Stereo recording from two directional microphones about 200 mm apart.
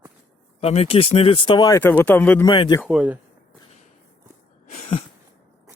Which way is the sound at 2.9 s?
5° right (ahead or behind).